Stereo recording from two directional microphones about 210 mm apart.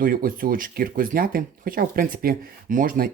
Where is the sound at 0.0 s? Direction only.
45° right (ahead or behind).